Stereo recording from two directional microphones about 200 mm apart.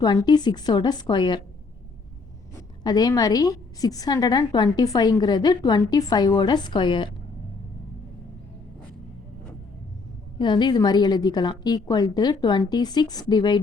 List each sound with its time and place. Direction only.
0.0 s a woman's voice: 20° left (ahead or behind)
2.8 s a woman's voice: 20° left (ahead or behind)
10.3 s a woman's voice: 20° left (ahead or behind)